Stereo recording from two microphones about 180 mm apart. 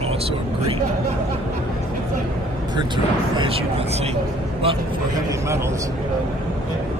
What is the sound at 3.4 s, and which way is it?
Speech, 30° right (ahead or behind).